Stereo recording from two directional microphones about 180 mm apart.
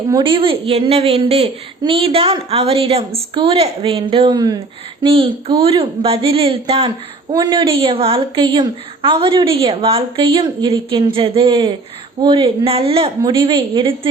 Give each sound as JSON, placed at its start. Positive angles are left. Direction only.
{"t": 0.1, "sound": "a woman's voice", "side_deg": -30}